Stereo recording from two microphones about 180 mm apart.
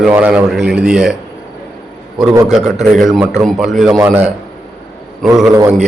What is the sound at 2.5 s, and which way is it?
A man's voice, centre (ahead or behind).